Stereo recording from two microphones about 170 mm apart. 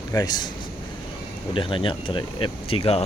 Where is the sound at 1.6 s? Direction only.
30° left (ahead or behind).